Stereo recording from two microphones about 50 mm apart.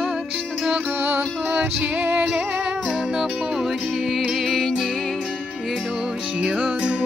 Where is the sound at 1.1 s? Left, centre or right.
Right.